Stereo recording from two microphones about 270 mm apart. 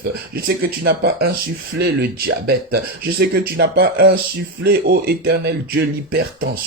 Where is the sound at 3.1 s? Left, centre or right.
Right.